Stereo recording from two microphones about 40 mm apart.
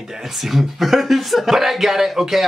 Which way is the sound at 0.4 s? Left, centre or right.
Centre.